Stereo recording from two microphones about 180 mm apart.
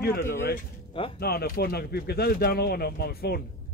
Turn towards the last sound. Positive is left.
turn(degrees=60)  # may be behind; listen again after turning